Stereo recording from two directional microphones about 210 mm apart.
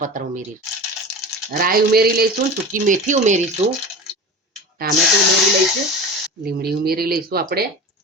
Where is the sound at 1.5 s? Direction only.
45° right (ahead or behind).